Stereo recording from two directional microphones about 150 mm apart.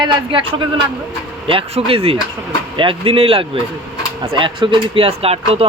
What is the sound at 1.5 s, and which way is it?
Speech, 35° right (ahead or behind).